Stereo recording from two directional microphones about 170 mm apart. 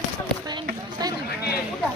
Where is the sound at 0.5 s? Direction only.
25° right (ahead or behind).